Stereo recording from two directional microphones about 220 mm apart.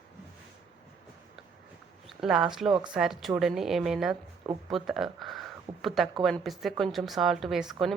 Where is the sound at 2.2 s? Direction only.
5° right (ahead or behind).